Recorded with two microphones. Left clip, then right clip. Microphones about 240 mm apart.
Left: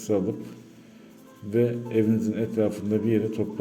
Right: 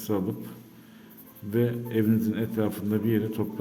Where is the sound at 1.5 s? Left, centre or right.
Centre.